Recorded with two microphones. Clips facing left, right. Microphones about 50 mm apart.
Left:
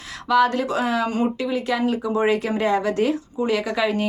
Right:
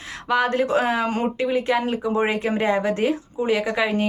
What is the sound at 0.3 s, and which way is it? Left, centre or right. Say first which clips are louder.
Speech: left 2 dB; right.